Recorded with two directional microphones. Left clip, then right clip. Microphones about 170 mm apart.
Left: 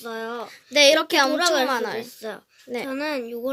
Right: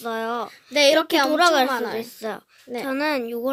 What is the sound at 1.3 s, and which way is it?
Speech, 50° right (ahead or behind).